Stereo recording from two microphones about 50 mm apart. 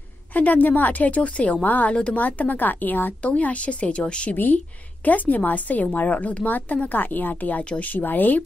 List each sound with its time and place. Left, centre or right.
0.3 s a woman's voice: left
3.2 s speech: left
4.3 s a woman's voice: left